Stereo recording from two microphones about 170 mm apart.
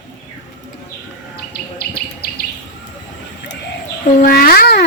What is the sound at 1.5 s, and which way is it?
Insect, 65° left (ahead or behind).